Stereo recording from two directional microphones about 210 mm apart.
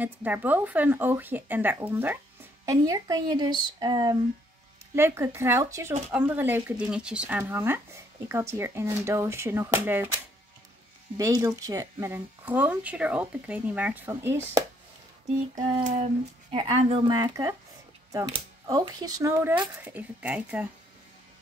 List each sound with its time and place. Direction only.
0.0 s speech: 10° right (ahead or behind)
11.1 s speech: 15° right (ahead or behind)
15.8 s a sound: 35° right (ahead or behind)
16.5 s speech: 20° right (ahead or behind)